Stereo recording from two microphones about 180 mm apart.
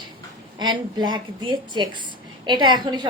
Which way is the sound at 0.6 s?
25° right (ahead or behind).